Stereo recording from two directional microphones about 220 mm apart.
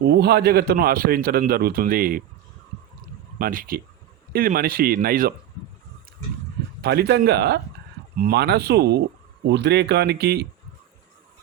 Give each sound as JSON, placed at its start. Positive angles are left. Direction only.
{"t": 0.0, "sound": "speech", "side_deg": -50}
{"t": 3.0, "sound": "a sound", "side_deg": -40}
{"t": 4.3, "sound": "speech", "side_deg": -45}
{"t": 6.8, "sound": "speech", "side_deg": -45}